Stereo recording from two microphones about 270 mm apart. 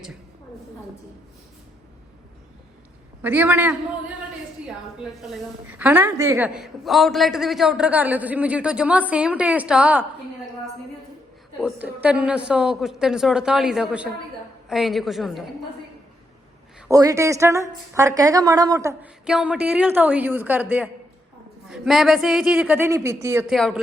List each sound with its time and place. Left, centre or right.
3.2 s a woman's voice: centre
5.2 s a woman's voice: centre
11.6 s a woman's voice: centre
16.9 s a woman's voice: centre